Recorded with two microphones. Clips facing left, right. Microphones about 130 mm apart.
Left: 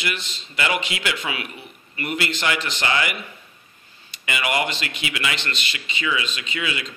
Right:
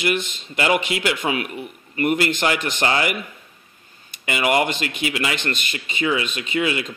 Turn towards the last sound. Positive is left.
turn(degrees=-50)  # may be behind; listen again after turning